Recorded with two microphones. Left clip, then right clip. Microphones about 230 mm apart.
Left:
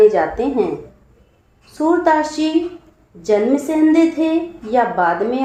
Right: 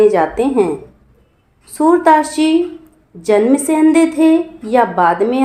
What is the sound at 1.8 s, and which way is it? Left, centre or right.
Speech, right.